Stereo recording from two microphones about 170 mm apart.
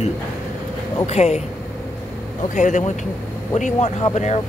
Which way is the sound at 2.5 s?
45° left (ahead or behind).